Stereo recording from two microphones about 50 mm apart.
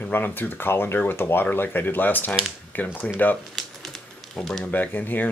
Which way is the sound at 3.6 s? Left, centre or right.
Centre.